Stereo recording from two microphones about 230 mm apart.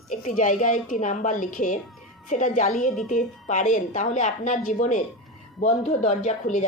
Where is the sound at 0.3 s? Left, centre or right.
Left.